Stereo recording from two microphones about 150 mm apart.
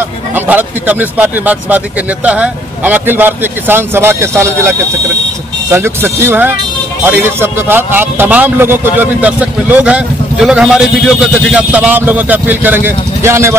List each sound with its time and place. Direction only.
0.3 s a man's voice: 10° right (ahead or behind)